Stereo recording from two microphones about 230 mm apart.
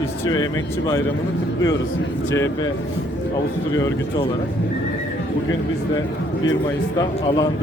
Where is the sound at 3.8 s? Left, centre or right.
Left.